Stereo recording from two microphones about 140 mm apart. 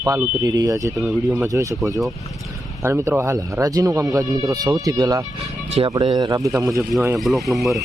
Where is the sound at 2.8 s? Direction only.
20° right (ahead or behind).